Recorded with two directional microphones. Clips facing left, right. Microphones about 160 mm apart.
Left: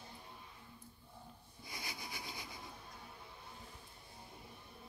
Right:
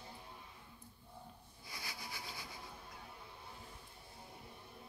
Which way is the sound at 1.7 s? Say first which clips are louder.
Left 1 dB; 20° left (ahead or behind).